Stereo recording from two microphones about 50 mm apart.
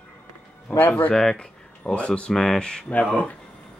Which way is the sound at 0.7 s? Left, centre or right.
Left.